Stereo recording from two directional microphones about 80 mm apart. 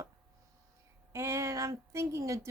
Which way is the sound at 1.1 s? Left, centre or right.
Right.